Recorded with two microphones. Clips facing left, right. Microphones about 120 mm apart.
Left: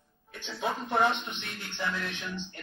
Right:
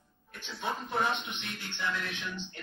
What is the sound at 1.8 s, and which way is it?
Speech, 45° left (ahead or behind).